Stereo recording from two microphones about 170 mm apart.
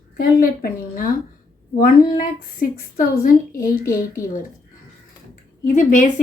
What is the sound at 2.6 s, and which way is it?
Speech, 55° left (ahead or behind).